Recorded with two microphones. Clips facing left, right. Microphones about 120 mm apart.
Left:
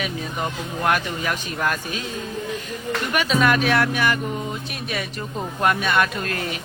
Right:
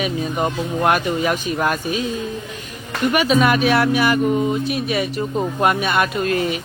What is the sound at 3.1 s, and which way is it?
Speech, 10° right (ahead or behind).